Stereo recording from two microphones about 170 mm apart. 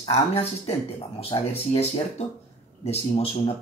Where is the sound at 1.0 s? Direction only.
35° left (ahead or behind).